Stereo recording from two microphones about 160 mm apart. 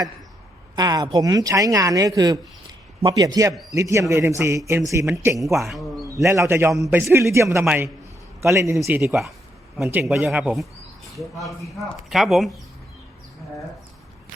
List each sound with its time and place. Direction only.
0.8 s a man's voice: 25° right (ahead or behind)
5.5 s a sound: centre (ahead or behind)
6.2 s a man's voice: 15° right (ahead or behind)
9.7 s a man's voice: 5° right (ahead or behind)